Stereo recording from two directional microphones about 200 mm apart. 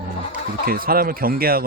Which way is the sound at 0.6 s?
45° right (ahead or behind).